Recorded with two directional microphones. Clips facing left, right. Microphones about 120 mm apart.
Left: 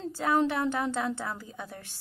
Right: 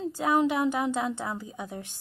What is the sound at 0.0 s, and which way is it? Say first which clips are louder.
A woman's voice: right 2 dB; 15° right (ahead or behind).